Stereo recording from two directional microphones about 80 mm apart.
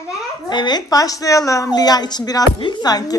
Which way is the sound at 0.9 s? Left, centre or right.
Left.